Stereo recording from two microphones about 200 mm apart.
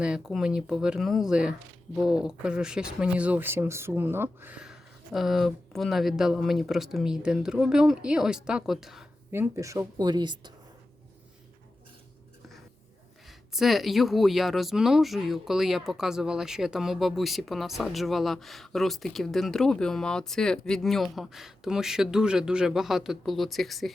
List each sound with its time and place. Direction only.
0.0 s speech: 5° right (ahead or behind)
9.3 s speech: 15° right (ahead or behind)
13.5 s speech: centre (ahead or behind)